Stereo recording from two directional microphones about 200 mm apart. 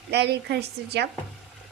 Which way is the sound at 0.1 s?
55° right (ahead or behind).